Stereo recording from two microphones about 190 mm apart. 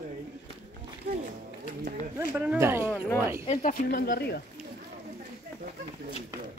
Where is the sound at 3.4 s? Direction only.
40° left (ahead or behind).